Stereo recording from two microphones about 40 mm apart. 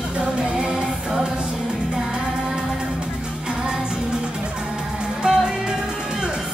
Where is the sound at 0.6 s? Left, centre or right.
Centre.